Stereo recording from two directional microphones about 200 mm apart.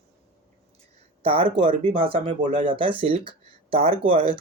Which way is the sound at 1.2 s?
25° right (ahead or behind).